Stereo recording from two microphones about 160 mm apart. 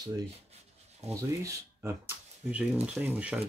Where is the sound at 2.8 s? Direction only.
10° right (ahead or behind).